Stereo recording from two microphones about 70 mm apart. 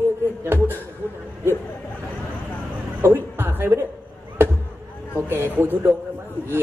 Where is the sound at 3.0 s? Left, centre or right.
Right.